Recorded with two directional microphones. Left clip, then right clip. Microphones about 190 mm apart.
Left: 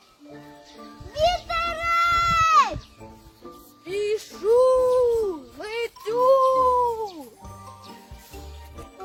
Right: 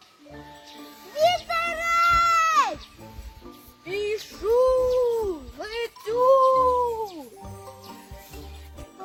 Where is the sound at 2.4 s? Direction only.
30° right (ahead or behind).